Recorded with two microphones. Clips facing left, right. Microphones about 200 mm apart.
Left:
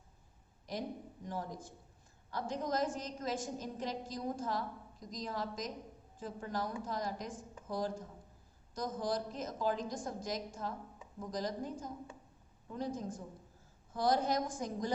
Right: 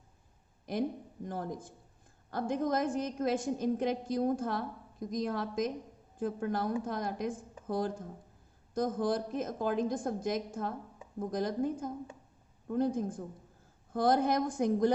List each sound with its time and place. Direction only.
0.6 s a woman's voice: 55° right (ahead or behind)